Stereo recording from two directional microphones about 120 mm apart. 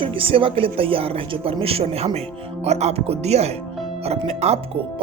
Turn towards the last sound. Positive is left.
turn(degrees=-60)  # may be behind; listen again after turning